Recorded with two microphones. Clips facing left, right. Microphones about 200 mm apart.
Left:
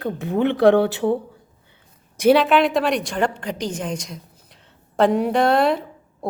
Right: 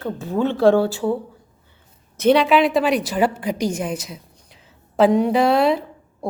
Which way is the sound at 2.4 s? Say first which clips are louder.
Right 1 dB; centre (ahead or behind).